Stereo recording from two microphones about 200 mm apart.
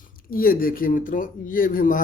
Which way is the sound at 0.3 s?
45° left (ahead or behind).